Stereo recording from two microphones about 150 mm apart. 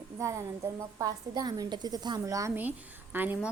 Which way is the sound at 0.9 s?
25° right (ahead or behind).